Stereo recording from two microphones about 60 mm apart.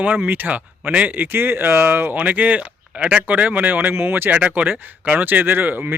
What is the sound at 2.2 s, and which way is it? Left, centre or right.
Speech, right.